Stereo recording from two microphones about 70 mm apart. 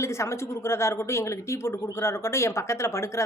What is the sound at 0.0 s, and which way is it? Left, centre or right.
Speech, left.